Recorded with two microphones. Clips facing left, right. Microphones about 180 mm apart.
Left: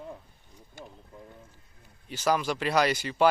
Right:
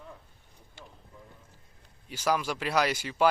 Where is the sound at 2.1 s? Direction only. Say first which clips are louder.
Left 2 dB; 10° right (ahead or behind).